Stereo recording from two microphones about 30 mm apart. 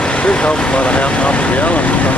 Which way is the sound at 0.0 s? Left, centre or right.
Left.